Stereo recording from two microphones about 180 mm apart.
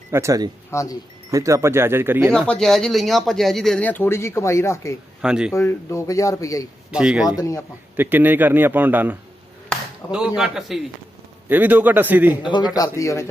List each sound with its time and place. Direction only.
0.1 s a man's voice: 15° right (ahead or behind)
0.7 s speech: 15° left (ahead or behind)
1.3 s a man's voice: 15° right (ahead or behind)
2.5 s speech: centre (ahead or behind)
5.2 s speech: 5° right (ahead or behind)
5.5 s speech: 15° left (ahead or behind)
6.9 s speech: 5° right (ahead or behind)
7.3 s a man's voice: 20° left (ahead or behind)
7.9 s a man's voice: 10° right (ahead or behind)
12.4 s a man's voice: 25° left (ahead or behind)